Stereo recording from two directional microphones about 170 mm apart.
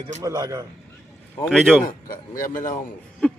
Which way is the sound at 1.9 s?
55° left (ahead or behind).